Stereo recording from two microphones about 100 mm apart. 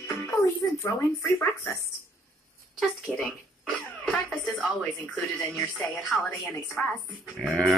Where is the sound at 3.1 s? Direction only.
10° right (ahead or behind).